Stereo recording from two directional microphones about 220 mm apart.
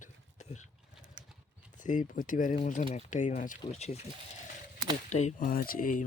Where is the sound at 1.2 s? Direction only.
55° right (ahead or behind).